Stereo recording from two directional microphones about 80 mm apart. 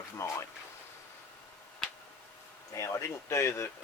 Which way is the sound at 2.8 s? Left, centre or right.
Left.